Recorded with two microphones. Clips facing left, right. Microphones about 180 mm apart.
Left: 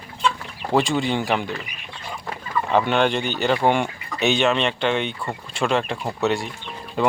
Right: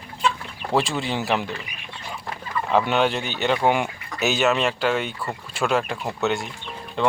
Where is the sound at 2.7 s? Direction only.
5° right (ahead or behind).